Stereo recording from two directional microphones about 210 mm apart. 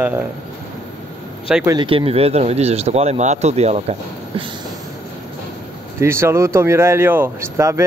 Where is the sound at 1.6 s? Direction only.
25° right (ahead or behind).